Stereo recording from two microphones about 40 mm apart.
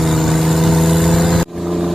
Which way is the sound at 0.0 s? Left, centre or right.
Centre.